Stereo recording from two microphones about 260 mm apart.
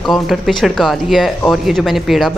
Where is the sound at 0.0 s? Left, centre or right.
Centre.